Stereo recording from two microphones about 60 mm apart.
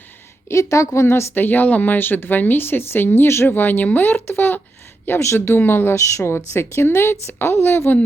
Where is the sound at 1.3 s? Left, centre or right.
Left.